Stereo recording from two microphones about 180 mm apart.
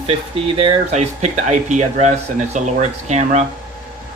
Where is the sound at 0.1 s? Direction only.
30° right (ahead or behind).